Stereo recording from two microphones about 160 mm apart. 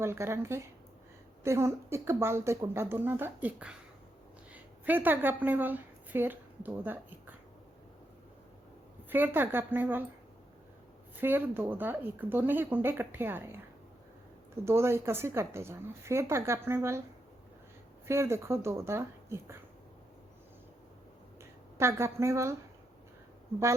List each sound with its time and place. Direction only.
0.0 s a woman's voice: 15° right (ahead or behind)
9.0 s speech: 10° right (ahead or behind)
11.2 s speech: 10° right (ahead or behind)
18.1 s speech: 15° right (ahead or behind)
21.8 s speech: 15° right (ahead or behind)